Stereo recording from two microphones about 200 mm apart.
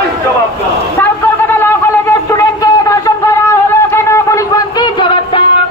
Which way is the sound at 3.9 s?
15° left (ahead or behind).